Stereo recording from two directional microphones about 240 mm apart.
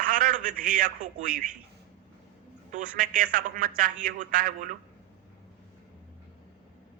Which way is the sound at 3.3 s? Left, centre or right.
Right.